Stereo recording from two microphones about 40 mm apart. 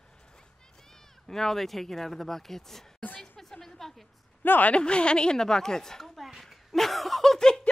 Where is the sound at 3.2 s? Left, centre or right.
Centre.